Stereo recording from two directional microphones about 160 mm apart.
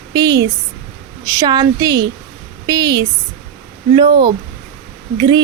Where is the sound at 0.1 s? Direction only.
25° right (ahead or behind).